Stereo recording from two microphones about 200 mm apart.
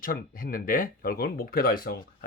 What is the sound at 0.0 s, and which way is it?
Speech, 45° left (ahead or behind).